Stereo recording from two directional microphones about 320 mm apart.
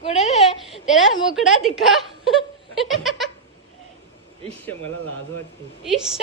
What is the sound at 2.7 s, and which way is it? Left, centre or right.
Laughter, centre.